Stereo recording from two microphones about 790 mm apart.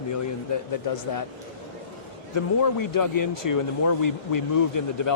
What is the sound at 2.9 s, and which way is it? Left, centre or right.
Speech, left.